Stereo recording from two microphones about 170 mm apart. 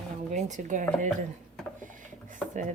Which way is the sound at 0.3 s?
45° right (ahead or behind).